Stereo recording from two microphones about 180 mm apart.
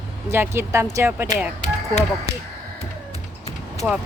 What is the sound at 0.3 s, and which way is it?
Speech, 15° right (ahead or behind).